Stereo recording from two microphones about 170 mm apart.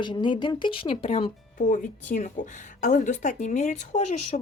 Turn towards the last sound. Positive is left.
turn(degrees=40)  # may be behind; listen again after turning